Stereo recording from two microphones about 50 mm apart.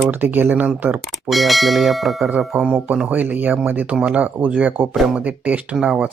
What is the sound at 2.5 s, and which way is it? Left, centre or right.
Speech, right.